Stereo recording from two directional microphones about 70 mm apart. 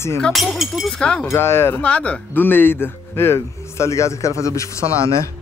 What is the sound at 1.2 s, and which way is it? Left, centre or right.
Speech, left.